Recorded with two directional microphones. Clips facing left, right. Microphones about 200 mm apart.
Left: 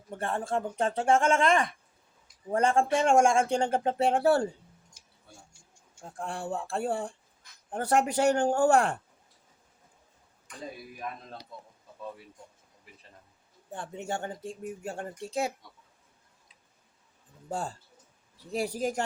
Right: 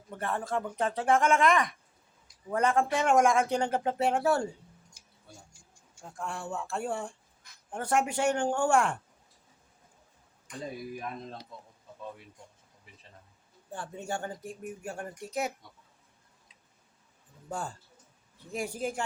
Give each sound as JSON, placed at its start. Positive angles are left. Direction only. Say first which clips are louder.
{"t": 0.1, "sound": "speech", "louder": "left 2 dB", "side_deg": 30}
{"t": 6.0, "sound": "speech", "louder": "left 2 dB", "side_deg": 35}
{"t": 13.7, "sound": "speech", "louder": "left 1 dB", "side_deg": 20}
{"t": 17.5, "sound": "speech", "louder": "left 3 dB", "side_deg": 30}